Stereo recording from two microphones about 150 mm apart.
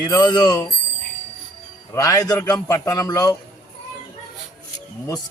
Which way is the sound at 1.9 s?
25° left (ahead or behind).